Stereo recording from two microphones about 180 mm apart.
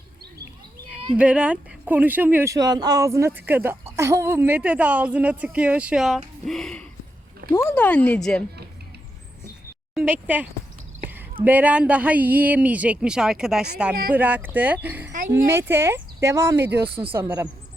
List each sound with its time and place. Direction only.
1.1 s a woman's voice: 5° right (ahead or behind)
7.5 s speech: 15° left (ahead or behind)
9.9 s a woman's voice: 10° right (ahead or behind)
16.8 s speech: 30° right (ahead or behind)
17.1 s a woman's voice: 10° right (ahead or behind)